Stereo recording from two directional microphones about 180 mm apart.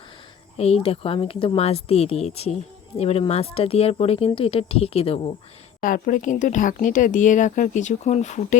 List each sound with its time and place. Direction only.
0.5 s speech: 35° left (ahead or behind)
5.8 s speech: 50° left (ahead or behind)